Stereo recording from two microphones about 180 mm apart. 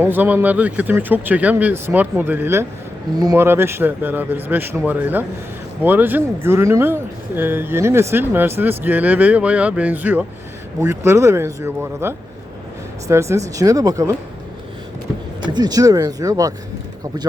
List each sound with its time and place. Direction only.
0.0 s speech: 10° right (ahead or behind)
15.4 s speech: 25° right (ahead or behind)